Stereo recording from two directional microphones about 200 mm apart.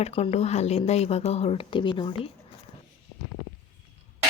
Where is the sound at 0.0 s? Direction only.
30° left (ahead or behind).